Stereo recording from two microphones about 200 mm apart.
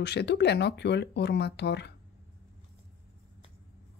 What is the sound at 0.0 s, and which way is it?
Speech, 55° left (ahead or behind).